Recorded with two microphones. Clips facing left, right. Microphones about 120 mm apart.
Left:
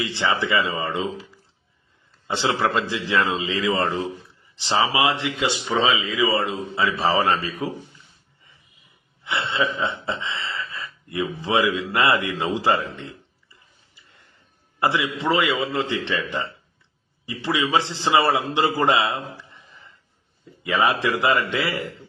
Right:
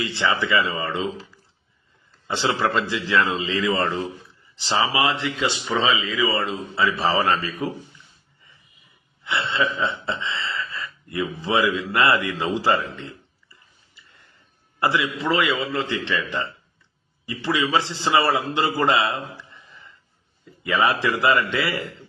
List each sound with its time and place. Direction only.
0.0 s a man's voice: 20° left (ahead or behind)
2.2 s a man's voice: 20° left (ahead or behind)
6.1 s a man's voice: 15° left (ahead or behind)
9.2 s a man's voice: 20° left (ahead or behind)
14.8 s a man's voice: 25° left (ahead or behind)
17.2 s a man's voice: 20° left (ahead or behind)
20.7 s a man's voice: 20° left (ahead or behind)